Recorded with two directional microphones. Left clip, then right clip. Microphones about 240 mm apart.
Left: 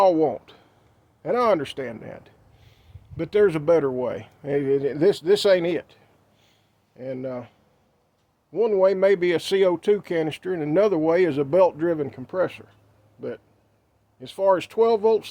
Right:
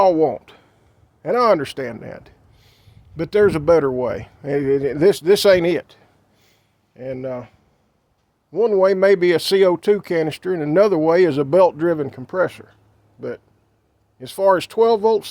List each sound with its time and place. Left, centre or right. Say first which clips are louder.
0.0 s speech: right 3 dB; right
8.5 s speech: right 4 dB; right